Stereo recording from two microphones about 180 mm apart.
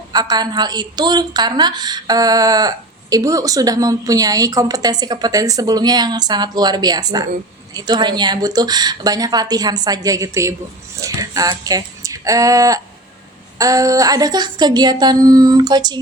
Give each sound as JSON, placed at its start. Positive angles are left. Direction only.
{"t": 0.1, "sound": "a woman's voice", "side_deg": -20}